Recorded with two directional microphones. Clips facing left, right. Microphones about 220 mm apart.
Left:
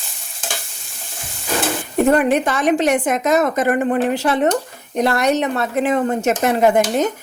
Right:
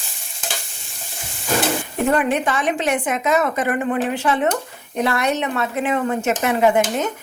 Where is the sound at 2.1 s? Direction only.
40° left (ahead or behind).